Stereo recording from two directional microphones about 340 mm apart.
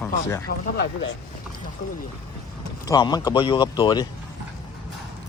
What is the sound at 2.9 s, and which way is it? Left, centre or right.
Speech, centre.